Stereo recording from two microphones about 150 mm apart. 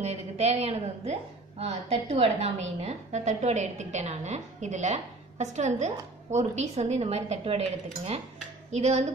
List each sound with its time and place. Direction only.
0.0 s a woman's voice: 45° right (ahead or behind)